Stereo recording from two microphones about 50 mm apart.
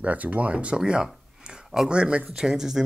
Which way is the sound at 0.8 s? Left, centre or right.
Centre.